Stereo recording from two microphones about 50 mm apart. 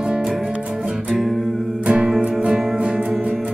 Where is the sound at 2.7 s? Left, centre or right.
Centre.